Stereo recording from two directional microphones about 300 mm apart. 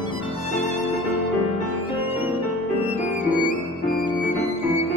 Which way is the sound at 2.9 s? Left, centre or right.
Left.